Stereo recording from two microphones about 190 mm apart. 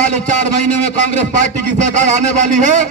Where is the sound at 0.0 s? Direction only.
40° right (ahead or behind).